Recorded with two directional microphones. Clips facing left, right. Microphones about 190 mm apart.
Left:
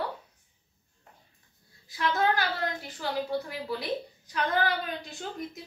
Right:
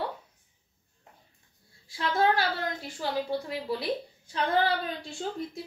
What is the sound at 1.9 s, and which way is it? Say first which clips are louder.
A woman's voice: right 1 dB; 30° right (ahead or behind).